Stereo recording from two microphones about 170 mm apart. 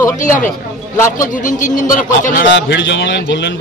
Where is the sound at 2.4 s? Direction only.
90° left.